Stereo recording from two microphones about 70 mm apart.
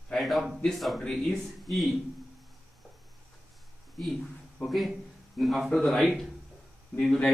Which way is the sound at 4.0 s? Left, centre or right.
Centre.